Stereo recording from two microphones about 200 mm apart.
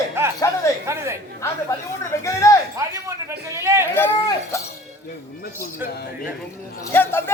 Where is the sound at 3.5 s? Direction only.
15° right (ahead or behind).